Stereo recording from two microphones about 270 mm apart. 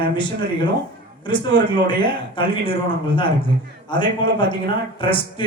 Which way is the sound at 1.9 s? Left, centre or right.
Centre.